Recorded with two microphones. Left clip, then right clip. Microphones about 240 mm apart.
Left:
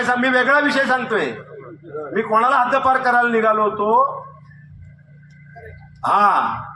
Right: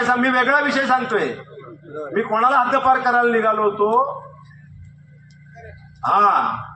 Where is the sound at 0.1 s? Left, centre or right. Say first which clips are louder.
Left 2 dB; left.